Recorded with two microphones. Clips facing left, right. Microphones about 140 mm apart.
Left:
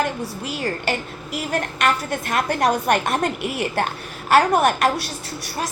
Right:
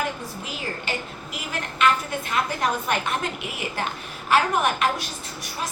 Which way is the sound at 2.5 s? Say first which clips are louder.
Left 6 dB; 65° left (ahead or behind).